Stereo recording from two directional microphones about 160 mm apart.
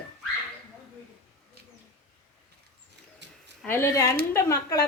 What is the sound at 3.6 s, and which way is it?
A woman's voice, 15° left (ahead or behind).